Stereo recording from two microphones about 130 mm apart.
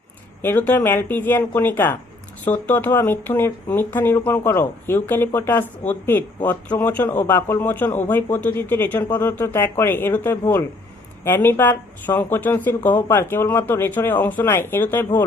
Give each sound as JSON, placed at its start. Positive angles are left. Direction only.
{"t": 0.4, "sound": "speech", "side_deg": 15}